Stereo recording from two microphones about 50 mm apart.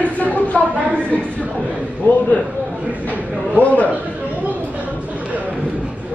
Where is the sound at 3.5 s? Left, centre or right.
Left.